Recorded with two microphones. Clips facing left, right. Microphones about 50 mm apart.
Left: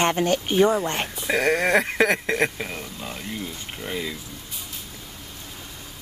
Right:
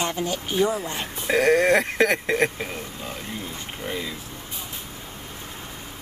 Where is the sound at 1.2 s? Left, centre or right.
Centre.